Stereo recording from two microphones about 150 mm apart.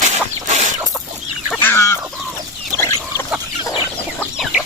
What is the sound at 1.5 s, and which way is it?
Chicken, 15° left (ahead or behind).